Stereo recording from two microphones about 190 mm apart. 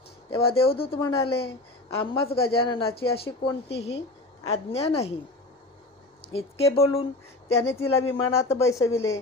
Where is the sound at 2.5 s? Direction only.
30° left (ahead or behind).